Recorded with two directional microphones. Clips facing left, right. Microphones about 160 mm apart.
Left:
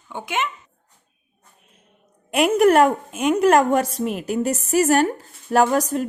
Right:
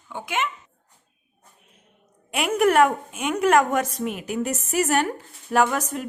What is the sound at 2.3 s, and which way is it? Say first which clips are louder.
A woman's voice: left 5 dB; 40° left (ahead or behind).